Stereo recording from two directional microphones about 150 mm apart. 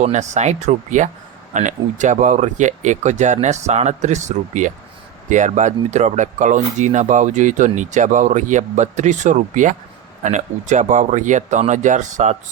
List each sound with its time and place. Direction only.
0.0 s speech: 50° right (ahead or behind)